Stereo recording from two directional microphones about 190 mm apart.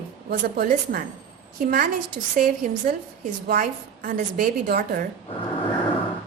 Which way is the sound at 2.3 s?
45° right (ahead or behind).